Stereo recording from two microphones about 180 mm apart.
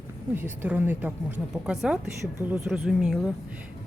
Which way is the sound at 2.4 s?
10° right (ahead or behind).